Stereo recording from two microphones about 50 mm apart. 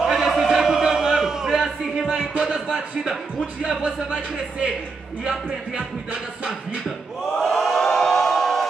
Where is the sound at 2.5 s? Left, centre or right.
Centre.